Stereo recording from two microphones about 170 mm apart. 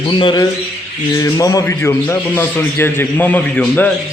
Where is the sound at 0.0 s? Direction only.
30° left (ahead or behind).